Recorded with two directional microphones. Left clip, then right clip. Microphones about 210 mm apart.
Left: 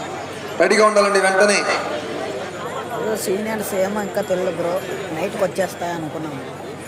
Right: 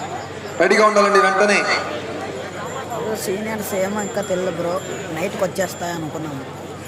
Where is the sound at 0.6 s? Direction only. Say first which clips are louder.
Even; 15° left (ahead or behind).